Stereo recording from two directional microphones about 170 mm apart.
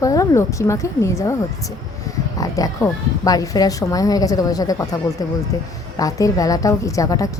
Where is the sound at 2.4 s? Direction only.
20° left (ahead or behind).